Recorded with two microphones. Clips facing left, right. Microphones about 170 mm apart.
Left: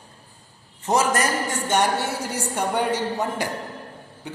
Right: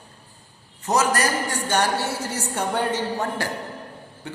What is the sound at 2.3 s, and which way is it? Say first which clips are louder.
A woman's voice: left 3 dB; 15° left (ahead or behind).